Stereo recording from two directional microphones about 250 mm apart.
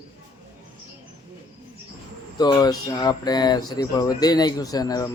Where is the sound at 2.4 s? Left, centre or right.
Centre.